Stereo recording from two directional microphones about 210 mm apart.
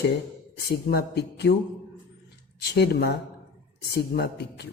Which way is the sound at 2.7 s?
50° left (ahead or behind).